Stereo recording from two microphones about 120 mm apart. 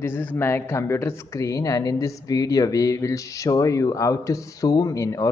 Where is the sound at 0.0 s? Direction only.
15° left (ahead or behind).